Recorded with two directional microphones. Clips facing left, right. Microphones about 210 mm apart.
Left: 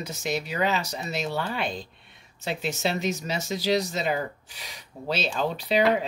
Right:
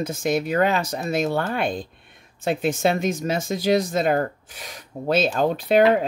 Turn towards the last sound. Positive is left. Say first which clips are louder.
# right 6 dB
turn(degrees=-50)  # may be behind; listen again after turning